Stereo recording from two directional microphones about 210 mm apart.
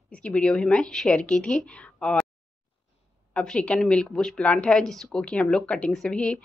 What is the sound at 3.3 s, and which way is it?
A woman's voice, 5° left (ahead or behind).